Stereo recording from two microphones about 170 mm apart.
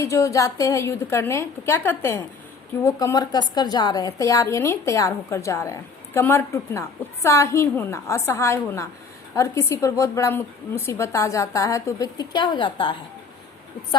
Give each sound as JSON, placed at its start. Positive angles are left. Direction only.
{"t": 0.0, "sound": "a woman's voice", "side_deg": 20}